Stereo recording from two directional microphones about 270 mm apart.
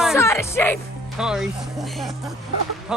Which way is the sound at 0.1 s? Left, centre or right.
Centre.